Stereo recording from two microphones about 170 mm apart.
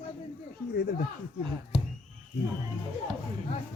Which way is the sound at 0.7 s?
75° left (ahead or behind).